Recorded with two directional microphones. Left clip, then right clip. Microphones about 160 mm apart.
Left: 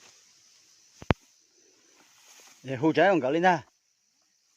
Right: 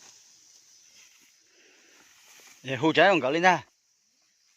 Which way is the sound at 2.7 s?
20° left (ahead or behind).